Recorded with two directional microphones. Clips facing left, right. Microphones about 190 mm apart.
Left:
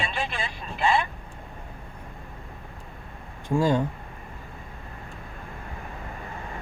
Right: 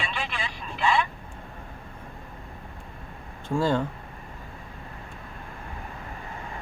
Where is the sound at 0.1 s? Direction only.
45° left (ahead or behind).